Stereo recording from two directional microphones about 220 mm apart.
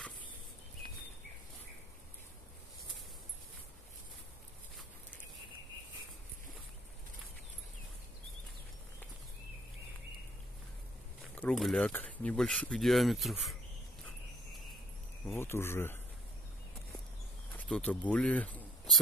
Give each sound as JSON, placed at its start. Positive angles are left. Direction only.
{"t": 11.3, "sound": "speech", "side_deg": 5}
{"t": 15.3, "sound": "speech", "side_deg": 10}
{"t": 17.6, "sound": "speech", "side_deg": 5}